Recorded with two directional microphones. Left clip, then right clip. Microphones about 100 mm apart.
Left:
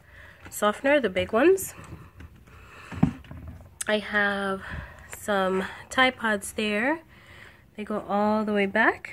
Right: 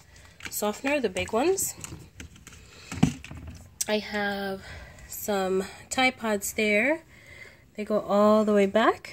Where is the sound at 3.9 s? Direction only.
10° right (ahead or behind); by 7.4 s 25° right (ahead or behind).